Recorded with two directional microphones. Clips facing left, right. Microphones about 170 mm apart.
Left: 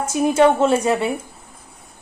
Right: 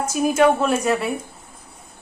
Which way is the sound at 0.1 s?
30° left (ahead or behind).